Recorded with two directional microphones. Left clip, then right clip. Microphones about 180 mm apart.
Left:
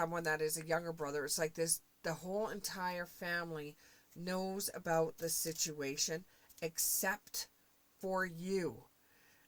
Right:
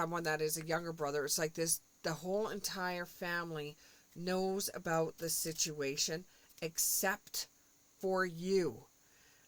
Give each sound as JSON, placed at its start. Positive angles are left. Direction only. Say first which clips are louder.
{"t": 0.0, "sound": "speech", "louder": "even", "side_deg": -40}